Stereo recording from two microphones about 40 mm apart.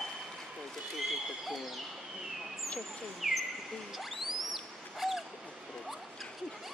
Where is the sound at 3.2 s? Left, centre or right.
Centre.